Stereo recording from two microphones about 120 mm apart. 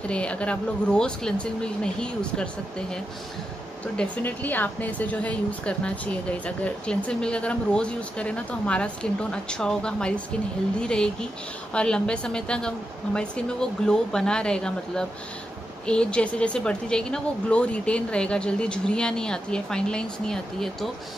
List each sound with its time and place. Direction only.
0.1 s a woman's voice: 10° left (ahead or behind)